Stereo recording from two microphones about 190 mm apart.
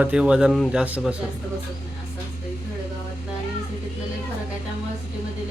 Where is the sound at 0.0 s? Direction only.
5° right (ahead or behind).